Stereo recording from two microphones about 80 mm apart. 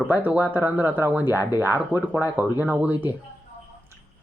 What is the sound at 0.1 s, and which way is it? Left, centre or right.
Speech, right.